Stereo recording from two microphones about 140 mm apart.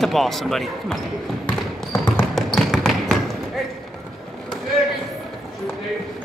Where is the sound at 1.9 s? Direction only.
15° left (ahead or behind).